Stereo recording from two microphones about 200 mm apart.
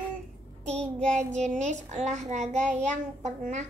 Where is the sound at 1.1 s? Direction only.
35° right (ahead or behind).